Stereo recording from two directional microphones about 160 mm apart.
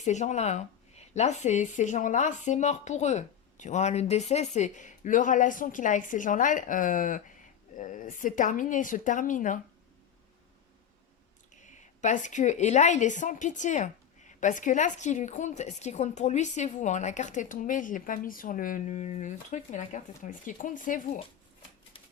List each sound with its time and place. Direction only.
0.0 s a woman's voice: 45° left (ahead or behind)
11.6 s a woman's voice: 50° left (ahead or behind)